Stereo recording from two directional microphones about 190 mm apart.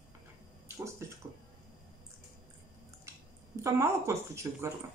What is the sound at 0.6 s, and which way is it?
Speech, 15° right (ahead or behind).